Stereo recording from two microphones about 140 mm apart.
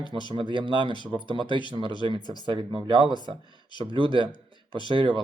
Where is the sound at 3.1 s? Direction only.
30° left (ahead or behind).